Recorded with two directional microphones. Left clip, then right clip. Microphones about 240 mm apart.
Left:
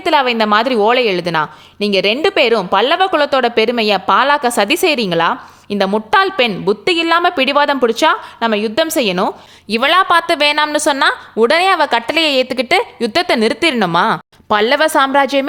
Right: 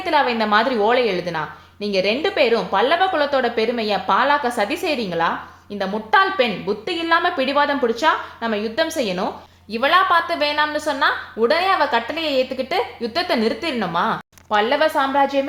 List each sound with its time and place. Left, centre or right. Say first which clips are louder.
0.0 s a woman's voice: left 5 dB; left